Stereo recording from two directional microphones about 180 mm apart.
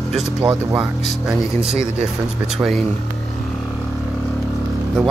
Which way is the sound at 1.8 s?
5° right (ahead or behind).